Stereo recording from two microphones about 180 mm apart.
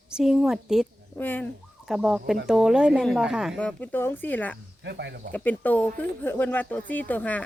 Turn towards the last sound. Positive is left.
turn(degrees=10)  # may be behind; listen again after turning